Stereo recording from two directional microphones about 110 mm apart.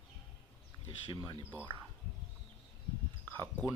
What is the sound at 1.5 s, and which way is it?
Speech, 15° left (ahead or behind).